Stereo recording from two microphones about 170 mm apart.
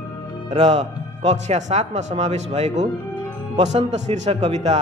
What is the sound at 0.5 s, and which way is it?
A man's voice, 35° right (ahead or behind).